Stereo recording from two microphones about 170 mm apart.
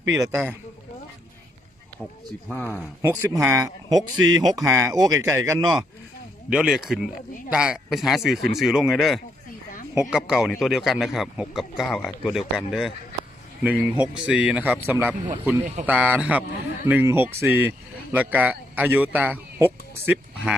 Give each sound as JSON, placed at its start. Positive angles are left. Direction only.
{"t": 0.1, "sound": "speech", "side_deg": -20}
{"t": 2.5, "sound": "speech", "side_deg": 10}
{"t": 3.0, "sound": "speech", "side_deg": -15}
{"t": 6.5, "sound": "speech", "side_deg": -5}